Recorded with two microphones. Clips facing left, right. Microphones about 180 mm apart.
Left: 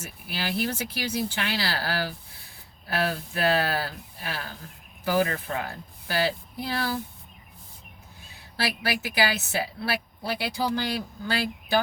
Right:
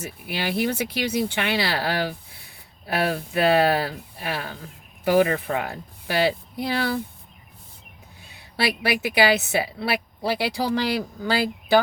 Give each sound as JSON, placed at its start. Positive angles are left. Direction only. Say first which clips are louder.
{"t": 0.3, "sound": "a woman's voice", "louder": "right 4 dB", "side_deg": -65}
{"t": 8.5, "sound": "a woman's voice", "louder": "right 5 dB", "side_deg": -70}